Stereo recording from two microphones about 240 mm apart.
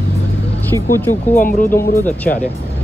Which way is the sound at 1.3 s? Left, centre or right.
Left.